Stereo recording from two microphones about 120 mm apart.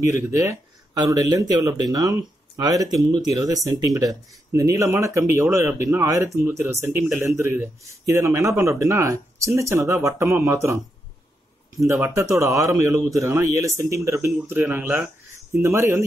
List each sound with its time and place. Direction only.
0.0 s speech: 25° right (ahead or behind)
11.8 s speech: 25° right (ahead or behind)